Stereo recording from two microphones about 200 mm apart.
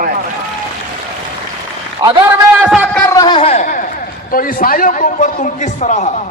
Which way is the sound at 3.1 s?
20° left (ahead or behind).